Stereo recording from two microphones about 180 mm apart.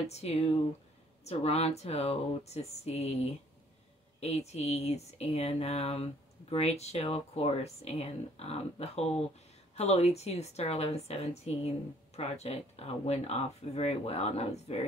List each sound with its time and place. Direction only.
0.1 s speech: 35° left (ahead or behind)